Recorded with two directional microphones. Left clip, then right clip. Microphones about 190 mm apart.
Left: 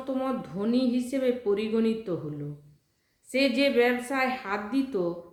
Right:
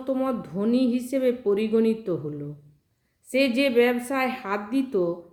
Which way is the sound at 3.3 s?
50° right (ahead or behind).